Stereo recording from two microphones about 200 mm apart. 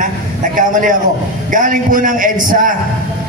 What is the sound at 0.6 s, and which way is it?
A man's voice, 40° right (ahead or behind).